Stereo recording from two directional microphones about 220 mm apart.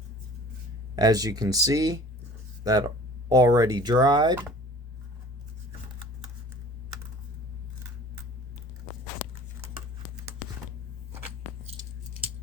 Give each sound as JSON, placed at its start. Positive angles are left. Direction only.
{"t": 0.9, "sound": "speech", "side_deg": -15}